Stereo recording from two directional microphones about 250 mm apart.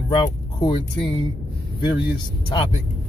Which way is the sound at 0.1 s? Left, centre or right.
Centre.